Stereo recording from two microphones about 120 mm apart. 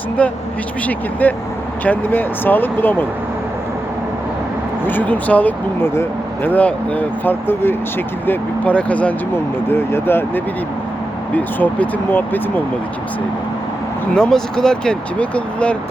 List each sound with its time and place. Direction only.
0.2 s speech: 10° left (ahead or behind)
4.9 s speech: 15° left (ahead or behind)
14.2 s speech: 5° left (ahead or behind)